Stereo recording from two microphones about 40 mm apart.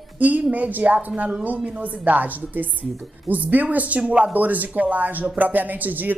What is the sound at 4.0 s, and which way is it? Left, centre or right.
Speech, right.